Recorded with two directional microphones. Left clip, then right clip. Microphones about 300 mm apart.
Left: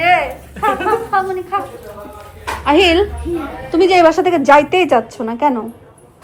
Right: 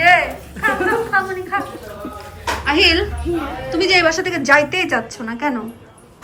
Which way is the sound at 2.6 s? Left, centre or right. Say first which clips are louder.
Left 4 dB; centre.